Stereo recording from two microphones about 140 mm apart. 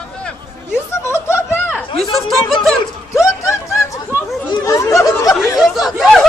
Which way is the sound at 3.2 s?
20° left (ahead or behind).